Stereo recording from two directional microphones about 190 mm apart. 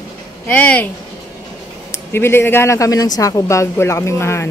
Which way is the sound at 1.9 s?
10° left (ahead or behind).